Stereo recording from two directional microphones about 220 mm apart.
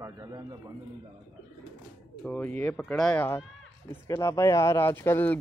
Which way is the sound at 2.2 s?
5° left (ahead or behind).